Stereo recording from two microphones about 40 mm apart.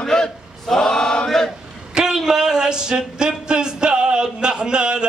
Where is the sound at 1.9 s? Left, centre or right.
Centre.